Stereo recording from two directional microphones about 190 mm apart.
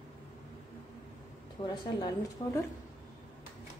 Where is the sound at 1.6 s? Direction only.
25° left (ahead or behind).